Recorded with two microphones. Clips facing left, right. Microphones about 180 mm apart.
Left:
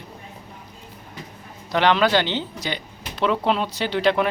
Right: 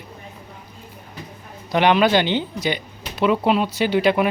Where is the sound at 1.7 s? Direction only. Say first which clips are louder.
Right 2 dB; 15° right (ahead or behind).